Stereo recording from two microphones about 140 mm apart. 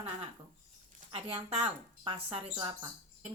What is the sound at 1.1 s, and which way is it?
Speech, 45° right (ahead or behind).